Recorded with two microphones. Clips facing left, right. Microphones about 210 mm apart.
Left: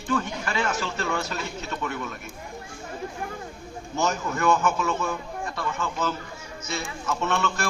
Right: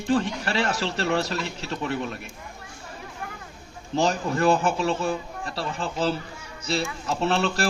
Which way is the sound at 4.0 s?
30° right (ahead or behind).